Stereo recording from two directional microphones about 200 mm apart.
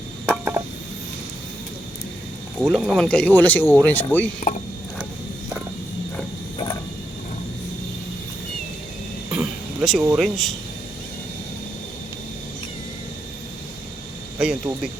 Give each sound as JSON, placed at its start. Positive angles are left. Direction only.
{"t": 0.3, "sound": "a sound", "side_deg": -5}
{"t": 2.7, "sound": "speech", "side_deg": 0}
{"t": 4.4, "sound": "speech", "side_deg": 40}
{"t": 9.3, "sound": "a sound", "side_deg": -5}
{"t": 10.2, "sound": "speech", "side_deg": 0}
{"t": 14.3, "sound": "speech", "side_deg": -5}